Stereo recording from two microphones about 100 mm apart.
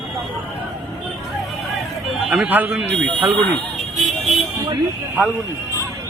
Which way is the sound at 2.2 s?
10° right (ahead or behind).